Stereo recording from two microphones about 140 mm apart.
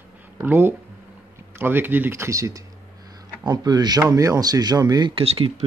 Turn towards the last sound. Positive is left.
turn(degrees=-40)  # may be behind; listen again after turning